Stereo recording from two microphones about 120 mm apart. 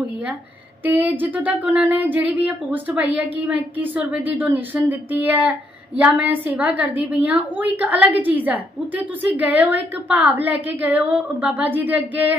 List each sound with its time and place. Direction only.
0.8 s a woman's voice: 15° right (ahead or behind)